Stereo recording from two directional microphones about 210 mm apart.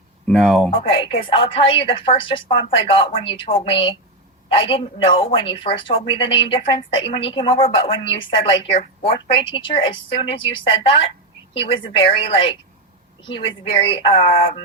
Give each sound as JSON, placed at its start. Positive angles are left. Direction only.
{"t": 0.3, "sound": "speech", "side_deg": 0}
{"t": 0.7, "sound": "a woman's voice", "side_deg": 25}